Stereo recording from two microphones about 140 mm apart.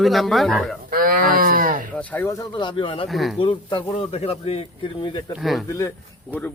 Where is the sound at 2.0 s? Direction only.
10° left (ahead or behind).